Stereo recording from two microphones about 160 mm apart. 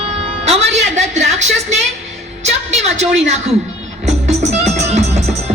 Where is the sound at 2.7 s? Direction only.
45° right (ahead or behind).